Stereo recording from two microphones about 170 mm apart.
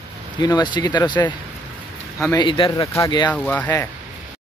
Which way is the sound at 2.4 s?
30° left (ahead or behind).